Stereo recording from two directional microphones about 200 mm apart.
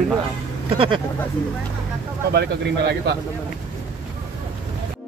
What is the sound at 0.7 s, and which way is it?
Speech, 25° right (ahead or behind).